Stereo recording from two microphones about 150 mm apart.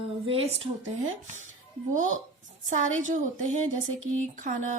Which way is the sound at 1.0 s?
55° right (ahead or behind).